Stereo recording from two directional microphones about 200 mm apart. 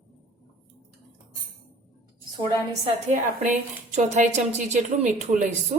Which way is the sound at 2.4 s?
35° right (ahead or behind).